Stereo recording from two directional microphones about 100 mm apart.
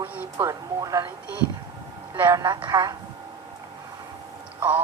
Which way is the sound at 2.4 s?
45° right (ahead or behind).